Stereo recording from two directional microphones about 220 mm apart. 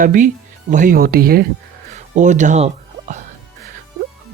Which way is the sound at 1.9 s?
35° right (ahead or behind).